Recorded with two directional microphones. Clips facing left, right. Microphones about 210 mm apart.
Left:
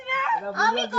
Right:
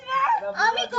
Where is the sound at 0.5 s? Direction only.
15° right (ahead or behind).